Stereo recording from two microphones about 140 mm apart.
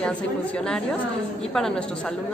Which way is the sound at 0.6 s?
5° left (ahead or behind).